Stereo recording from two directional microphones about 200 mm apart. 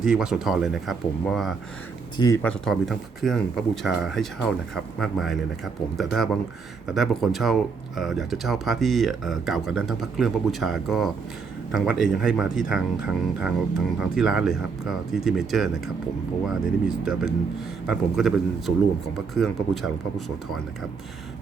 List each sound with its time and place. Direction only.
0.0 s speech: 5° right (ahead or behind)
2.1 s speech: 20° left (ahead or behind)
2.4 s speech: 5° left (ahead or behind)
16.8 s speech: 5° right (ahead or behind)